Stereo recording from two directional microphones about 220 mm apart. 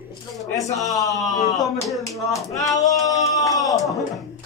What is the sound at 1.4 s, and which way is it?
Speech, centre (ahead or behind).